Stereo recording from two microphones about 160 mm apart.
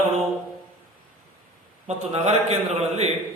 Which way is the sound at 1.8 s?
40° right (ahead or behind).